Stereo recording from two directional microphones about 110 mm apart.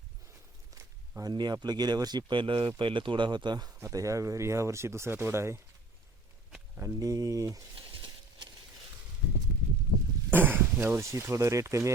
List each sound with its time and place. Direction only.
0.7 s speech: 30° right (ahead or behind)
3.8 s speech: 30° right (ahead or behind)
6.7 s speech: 25° right (ahead or behind)
10.3 s speech: 15° right (ahead or behind)